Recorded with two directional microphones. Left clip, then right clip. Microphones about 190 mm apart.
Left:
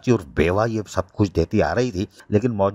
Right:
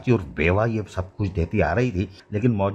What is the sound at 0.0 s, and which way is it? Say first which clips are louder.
Speech: left 2 dB; 35° left (ahead or behind).